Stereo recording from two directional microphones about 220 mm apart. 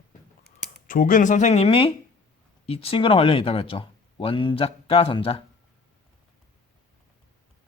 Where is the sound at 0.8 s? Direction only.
40° left (ahead or behind).